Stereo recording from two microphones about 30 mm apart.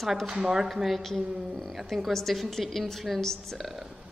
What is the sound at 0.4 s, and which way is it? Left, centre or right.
Speech, centre.